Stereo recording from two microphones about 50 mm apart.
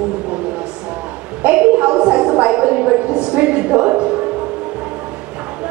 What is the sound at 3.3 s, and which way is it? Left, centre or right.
Speech, right.